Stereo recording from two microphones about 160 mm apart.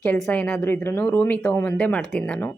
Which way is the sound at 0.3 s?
10° left (ahead or behind).